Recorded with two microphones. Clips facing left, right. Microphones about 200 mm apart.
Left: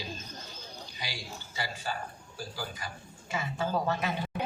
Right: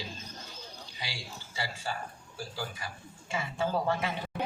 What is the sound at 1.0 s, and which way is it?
A man's voice, 30° right (ahead or behind).